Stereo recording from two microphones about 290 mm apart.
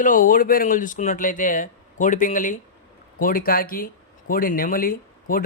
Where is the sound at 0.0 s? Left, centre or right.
Left.